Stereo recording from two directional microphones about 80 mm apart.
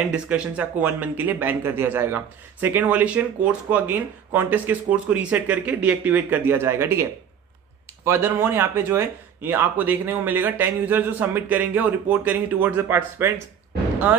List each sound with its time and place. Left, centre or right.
0.1 s speech: centre
12.8 s speech: right